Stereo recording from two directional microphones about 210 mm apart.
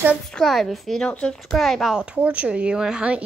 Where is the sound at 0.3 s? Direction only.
Centre (ahead or behind).